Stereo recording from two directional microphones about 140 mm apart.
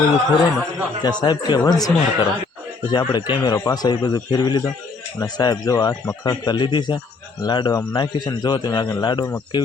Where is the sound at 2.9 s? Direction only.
30° left (ahead or behind).